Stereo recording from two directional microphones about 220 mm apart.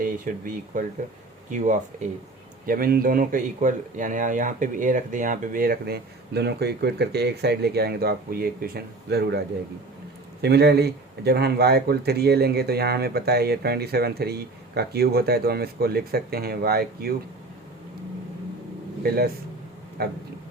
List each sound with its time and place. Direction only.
0.0 s speech: 40° right (ahead or behind)
10.4 s speech: 45° right (ahead or behind)
19.0 s speech: 45° right (ahead or behind)